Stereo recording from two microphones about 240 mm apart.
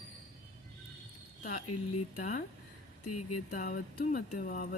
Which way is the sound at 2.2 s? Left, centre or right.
Left.